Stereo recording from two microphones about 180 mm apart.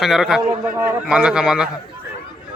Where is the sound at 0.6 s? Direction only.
15° right (ahead or behind).